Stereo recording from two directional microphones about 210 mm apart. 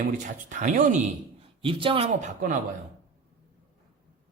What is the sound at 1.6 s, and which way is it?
Speech, 25° right (ahead or behind).